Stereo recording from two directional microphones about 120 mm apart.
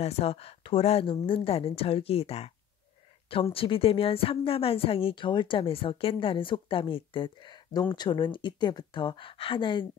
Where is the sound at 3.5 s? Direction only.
50° left (ahead or behind).